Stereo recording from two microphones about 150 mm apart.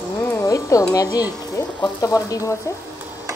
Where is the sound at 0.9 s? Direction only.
25° left (ahead or behind).